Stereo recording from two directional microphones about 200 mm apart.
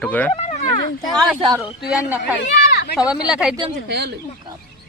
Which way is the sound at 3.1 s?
5° right (ahead or behind).